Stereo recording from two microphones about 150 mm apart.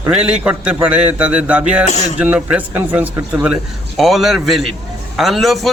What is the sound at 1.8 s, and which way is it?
Speech, 50° left (ahead or behind).